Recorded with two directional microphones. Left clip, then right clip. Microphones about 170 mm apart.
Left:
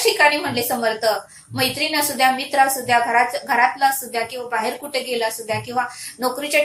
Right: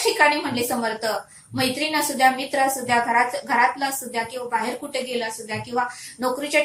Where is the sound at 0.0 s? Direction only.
20° left (ahead or behind).